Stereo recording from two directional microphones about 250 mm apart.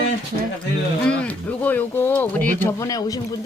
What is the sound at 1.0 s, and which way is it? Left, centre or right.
Speech, centre.